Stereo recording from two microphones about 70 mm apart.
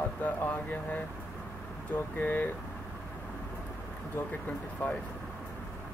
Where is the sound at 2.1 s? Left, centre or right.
Left.